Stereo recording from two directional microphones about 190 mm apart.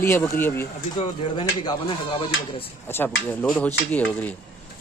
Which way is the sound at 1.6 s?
25° left (ahead or behind).